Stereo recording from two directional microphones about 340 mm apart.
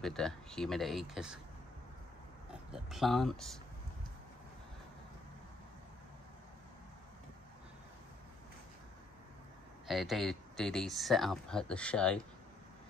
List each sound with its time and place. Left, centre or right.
0.0 s speech: centre
2.7 s speech: centre
9.8 s speech: centre